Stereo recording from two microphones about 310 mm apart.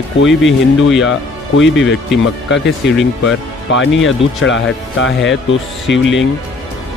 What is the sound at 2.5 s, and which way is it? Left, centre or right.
Speech, left.